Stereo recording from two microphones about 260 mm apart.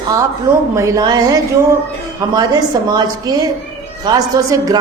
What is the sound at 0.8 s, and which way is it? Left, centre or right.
Speech, centre.